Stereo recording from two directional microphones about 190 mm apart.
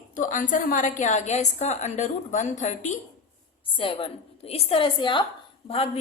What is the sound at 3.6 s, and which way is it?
A woman's voice, 30° left (ahead or behind).